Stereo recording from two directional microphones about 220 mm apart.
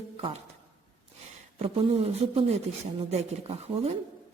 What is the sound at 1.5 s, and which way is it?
A woman's voice, 25° right (ahead or behind).